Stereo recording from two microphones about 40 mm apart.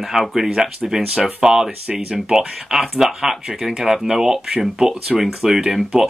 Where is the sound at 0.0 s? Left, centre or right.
Centre.